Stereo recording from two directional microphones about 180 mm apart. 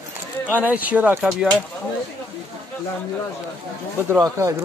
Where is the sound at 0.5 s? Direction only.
10° right (ahead or behind).